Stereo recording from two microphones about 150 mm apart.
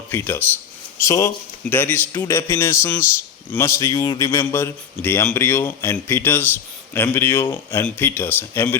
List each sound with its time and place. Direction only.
0.1 s a man's voice: 10° left (ahead or behind)